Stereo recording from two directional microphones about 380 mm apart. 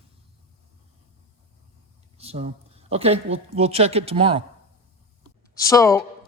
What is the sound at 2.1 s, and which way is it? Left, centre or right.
Speech, centre.